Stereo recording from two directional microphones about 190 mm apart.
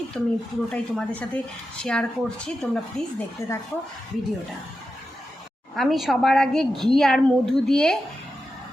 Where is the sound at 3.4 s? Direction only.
15° left (ahead or behind).